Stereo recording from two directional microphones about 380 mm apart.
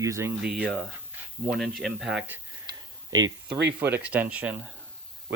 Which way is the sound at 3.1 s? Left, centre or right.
Right.